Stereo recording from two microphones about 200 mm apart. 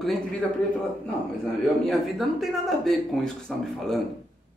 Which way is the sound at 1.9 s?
Centre (ahead or behind).